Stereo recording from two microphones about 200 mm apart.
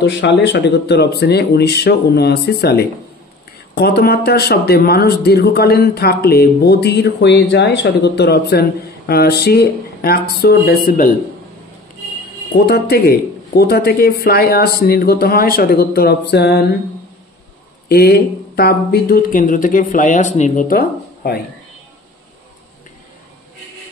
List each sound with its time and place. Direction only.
0.0 s speech: 60° left (ahead or behind)
12.5 s speech: 55° left (ahead or behind)
17.8 s speech: 50° left (ahead or behind)